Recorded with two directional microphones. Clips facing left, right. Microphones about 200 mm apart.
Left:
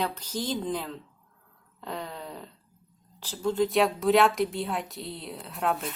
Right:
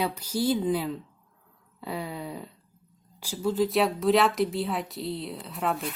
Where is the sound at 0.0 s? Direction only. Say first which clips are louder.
Right 4 dB; 10° right (ahead or behind).